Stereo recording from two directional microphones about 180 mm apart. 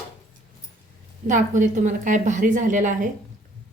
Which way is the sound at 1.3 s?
45° right (ahead or behind).